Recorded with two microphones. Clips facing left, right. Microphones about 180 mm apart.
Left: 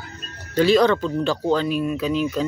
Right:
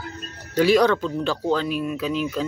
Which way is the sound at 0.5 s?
10° right (ahead or behind).